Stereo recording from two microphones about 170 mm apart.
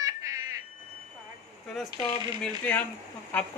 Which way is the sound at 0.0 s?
20° right (ahead or behind).